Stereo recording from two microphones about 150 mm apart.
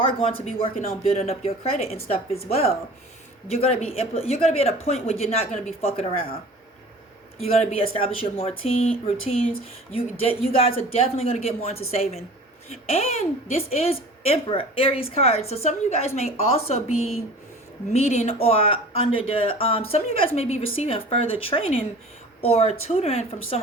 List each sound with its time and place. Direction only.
0.0 s speech: 40° left (ahead or behind)
7.3 s speech: 40° left (ahead or behind)
17.9 s speech: 45° left (ahead or behind)